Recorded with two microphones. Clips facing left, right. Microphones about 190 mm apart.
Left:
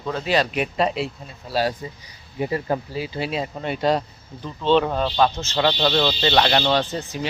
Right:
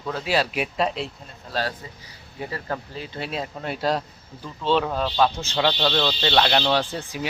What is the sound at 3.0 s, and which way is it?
Speech, 5° left (ahead or behind).